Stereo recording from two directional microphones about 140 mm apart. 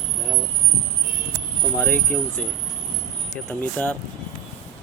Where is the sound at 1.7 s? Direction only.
10° left (ahead or behind).